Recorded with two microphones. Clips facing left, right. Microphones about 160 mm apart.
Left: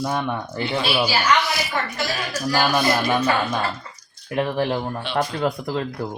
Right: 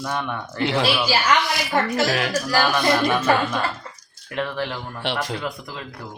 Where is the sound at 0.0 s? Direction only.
25° left (ahead or behind).